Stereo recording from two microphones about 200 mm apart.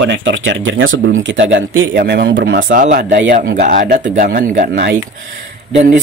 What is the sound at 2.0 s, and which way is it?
Speech, 60° right (ahead or behind).